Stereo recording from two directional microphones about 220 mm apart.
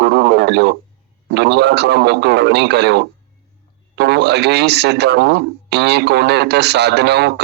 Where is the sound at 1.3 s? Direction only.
50° right (ahead or behind).